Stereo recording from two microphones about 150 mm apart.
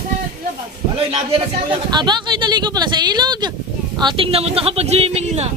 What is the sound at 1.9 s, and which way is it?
A woman's voice, 30° right (ahead or behind).